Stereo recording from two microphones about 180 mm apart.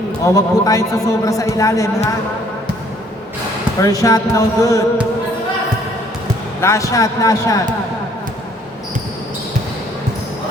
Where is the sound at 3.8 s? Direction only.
20° left (ahead or behind).